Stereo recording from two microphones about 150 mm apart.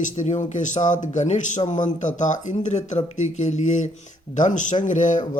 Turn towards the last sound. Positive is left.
turn(degrees=55)  # may be behind; listen again after turning